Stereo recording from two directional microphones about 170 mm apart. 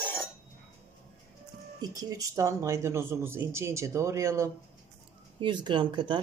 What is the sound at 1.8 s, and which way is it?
Speech, 20° right (ahead or behind).